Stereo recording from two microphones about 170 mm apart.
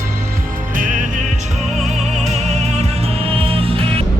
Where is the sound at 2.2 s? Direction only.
40° right (ahead or behind).